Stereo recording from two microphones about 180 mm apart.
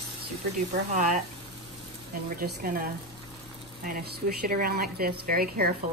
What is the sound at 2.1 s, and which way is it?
Speech, 55° right (ahead or behind).